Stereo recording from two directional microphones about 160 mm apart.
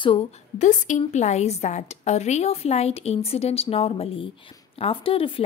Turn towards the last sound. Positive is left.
turn(degrees=35)  # may be behind; listen again after turning